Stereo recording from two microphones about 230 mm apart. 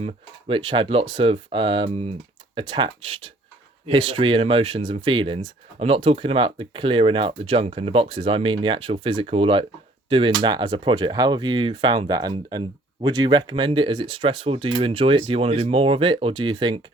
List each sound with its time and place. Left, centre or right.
0.0 s speech: right